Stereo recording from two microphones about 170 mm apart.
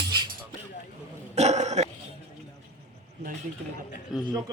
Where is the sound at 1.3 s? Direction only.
40° right (ahead or behind).